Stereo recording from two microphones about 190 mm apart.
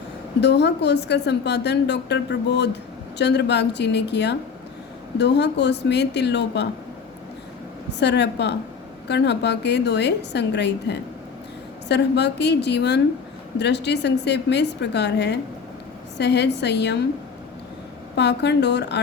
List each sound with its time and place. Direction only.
0.3 s a woman's voice: 65° left (ahead or behind)
7.9 s a woman's voice: 65° left (ahead or behind)
18.2 s a woman's voice: 65° left (ahead or behind)